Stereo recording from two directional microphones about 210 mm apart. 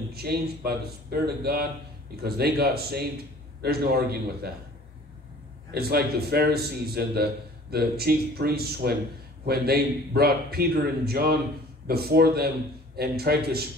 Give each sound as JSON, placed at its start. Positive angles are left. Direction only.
{"t": 0.1, "sound": "a man's voice", "side_deg": -50}
{"t": 5.8, "sound": "a man's voice", "side_deg": -50}